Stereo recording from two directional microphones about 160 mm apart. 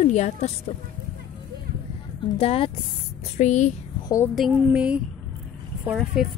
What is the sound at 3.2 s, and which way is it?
Speech, 45° left (ahead or behind).